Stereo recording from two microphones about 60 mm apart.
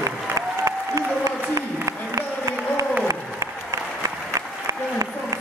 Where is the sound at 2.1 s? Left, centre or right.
Right.